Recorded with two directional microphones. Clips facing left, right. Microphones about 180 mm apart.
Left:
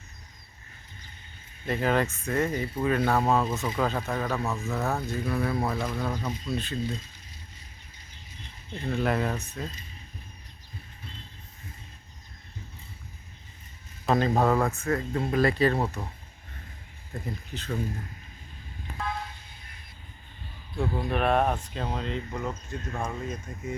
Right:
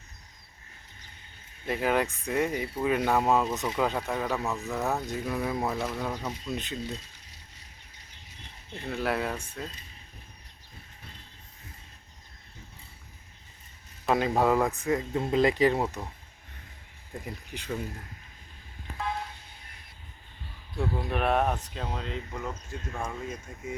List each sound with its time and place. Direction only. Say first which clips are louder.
1.6 s speech: left 1 dB; 10° right (ahead or behind)
8.8 s speech: left 3 dB; 5° right (ahead or behind)
14.0 s speech: left 1 dB; 10° right (ahead or behind)
17.2 s speech: left 2 dB; 15° right (ahead or behind)
20.7 s speech: left 2 dB; 5° right (ahead or behind)